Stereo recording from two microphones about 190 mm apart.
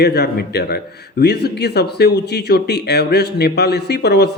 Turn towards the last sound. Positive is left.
turn(degrees=60)  # may be behind; listen again after turning